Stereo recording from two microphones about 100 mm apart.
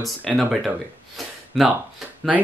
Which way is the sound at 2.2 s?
5° left (ahead or behind).